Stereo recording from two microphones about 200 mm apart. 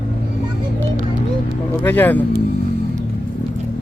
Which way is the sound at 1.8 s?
10° left (ahead or behind).